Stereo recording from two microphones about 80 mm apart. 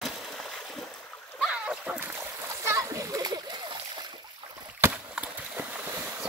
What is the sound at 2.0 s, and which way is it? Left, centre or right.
Splash, right.